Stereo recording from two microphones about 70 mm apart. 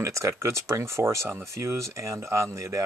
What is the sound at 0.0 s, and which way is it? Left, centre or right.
Speech, right.